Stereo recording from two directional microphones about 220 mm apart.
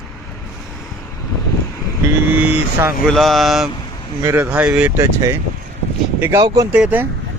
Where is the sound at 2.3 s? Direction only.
5° right (ahead or behind).